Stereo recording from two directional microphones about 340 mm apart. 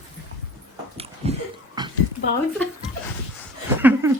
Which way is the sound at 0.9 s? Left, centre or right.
Centre.